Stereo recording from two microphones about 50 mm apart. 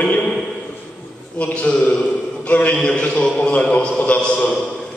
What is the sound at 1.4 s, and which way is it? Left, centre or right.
A man's voice, left.